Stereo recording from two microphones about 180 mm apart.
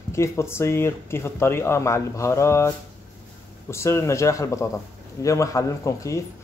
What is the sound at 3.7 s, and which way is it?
Speech, 15° left (ahead or behind).